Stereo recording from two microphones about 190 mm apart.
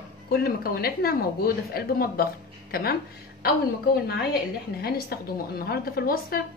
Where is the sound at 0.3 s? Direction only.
55° left (ahead or behind).